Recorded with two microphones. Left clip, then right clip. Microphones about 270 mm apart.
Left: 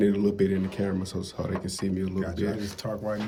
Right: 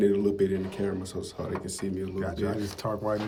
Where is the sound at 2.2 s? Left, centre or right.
Centre.